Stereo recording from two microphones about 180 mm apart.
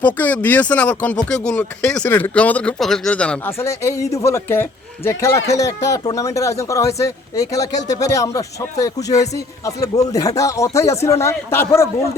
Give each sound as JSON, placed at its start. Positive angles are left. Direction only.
{"t": 0.0, "sound": "a man's voice", "side_deg": 10}